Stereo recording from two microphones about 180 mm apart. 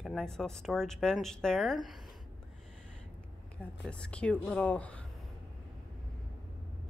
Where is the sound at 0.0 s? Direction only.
Centre (ahead or behind).